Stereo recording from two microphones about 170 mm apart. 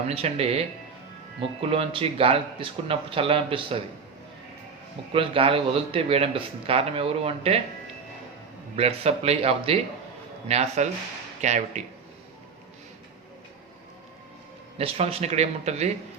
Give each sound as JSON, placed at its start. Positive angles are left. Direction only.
{"t": 0.1, "sound": "speech", "side_deg": -35}
{"t": 5.1, "sound": "speech", "side_deg": -30}
{"t": 8.7, "sound": "speech", "side_deg": -35}
{"t": 14.8, "sound": "speech", "side_deg": -35}